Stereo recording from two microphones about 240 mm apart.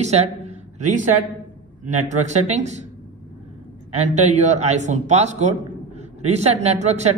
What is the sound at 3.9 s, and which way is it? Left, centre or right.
A man's voice, right.